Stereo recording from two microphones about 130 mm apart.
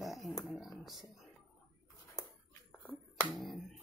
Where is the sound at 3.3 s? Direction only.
Centre (ahead or behind).